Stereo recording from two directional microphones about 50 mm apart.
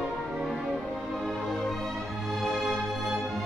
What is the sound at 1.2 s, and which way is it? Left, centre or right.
Music, centre.